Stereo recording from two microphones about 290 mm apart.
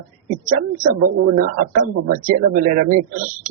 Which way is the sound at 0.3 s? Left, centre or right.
Right.